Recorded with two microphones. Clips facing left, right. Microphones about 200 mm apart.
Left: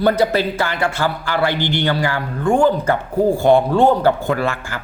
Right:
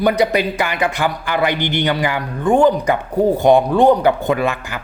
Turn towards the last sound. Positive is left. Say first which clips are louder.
# right 2 dB
turn(degrees=-15)  # may be behind; listen again after turning